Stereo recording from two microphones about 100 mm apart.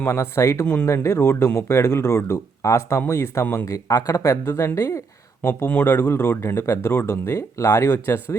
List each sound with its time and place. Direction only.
0.1 s speech: 30° left (ahead or behind)
0.6 s speech: 15° left (ahead or behind)
0.9 s speech: 25° left (ahead or behind)
3.4 s speech: 15° left (ahead or behind)
3.7 s speech: 35° left (ahead or behind)
5.5 s speech: 15° left (ahead or behind)